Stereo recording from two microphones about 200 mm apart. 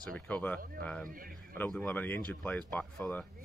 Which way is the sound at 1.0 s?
45° right (ahead or behind).